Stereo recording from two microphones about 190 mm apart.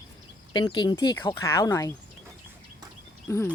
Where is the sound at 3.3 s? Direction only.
15° left (ahead or behind).